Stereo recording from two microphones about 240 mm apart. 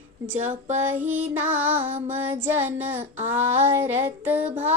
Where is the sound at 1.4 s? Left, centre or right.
Centre.